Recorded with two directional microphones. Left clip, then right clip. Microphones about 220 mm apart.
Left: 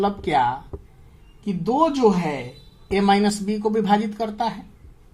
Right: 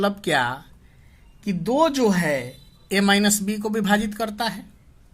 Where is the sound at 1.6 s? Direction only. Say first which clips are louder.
Left 1 dB; 45° right (ahead or behind).